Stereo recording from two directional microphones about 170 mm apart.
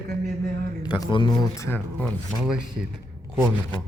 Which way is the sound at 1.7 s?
10° left (ahead or behind).